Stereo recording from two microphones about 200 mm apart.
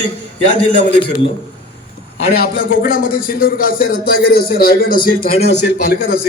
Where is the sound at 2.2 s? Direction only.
50° left (ahead or behind).